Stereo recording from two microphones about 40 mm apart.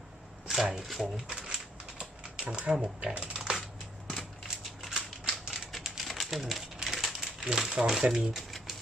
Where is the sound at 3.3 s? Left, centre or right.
Centre.